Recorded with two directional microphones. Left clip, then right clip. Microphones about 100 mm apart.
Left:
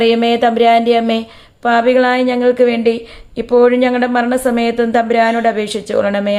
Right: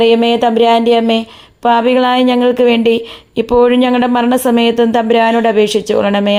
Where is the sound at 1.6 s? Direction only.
50° right (ahead or behind); by 3.5 s 65° right (ahead or behind).